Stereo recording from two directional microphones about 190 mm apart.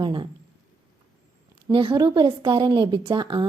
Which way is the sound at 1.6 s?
25° right (ahead or behind).